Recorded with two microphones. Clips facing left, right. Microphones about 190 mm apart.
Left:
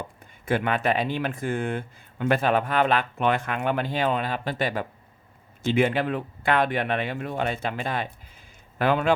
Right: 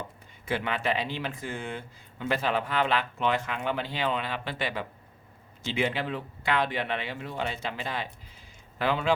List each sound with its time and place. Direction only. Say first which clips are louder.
0.4 s speech: left 5 dB; 50° left (ahead or behind)